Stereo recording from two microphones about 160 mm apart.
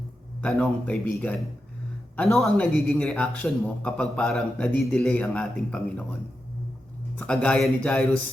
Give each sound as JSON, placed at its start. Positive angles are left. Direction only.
{"t": 0.4, "sound": "a man's voice", "side_deg": 5}
{"t": 7.2, "sound": "speech", "side_deg": 5}